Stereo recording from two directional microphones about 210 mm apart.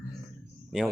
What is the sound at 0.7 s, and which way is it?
Speech, centre (ahead or behind).